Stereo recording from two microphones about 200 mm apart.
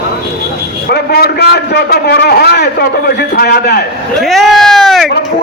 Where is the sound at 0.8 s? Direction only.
50° left (ahead or behind).